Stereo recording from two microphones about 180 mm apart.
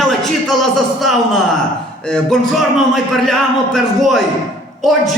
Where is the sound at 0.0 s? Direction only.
Centre (ahead or behind).